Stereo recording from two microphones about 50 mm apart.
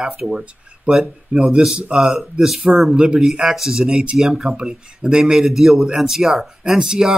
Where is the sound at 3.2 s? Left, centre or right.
Centre.